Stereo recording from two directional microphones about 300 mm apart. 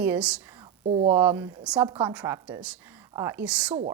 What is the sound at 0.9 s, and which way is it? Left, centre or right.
Speech, right.